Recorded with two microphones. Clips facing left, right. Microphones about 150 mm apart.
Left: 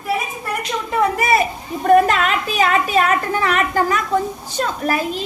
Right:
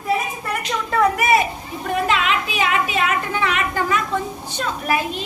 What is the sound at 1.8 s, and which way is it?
A woman's voice, 45° left (ahead or behind).